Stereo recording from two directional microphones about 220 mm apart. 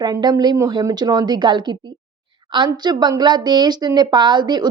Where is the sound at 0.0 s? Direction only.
20° right (ahead or behind).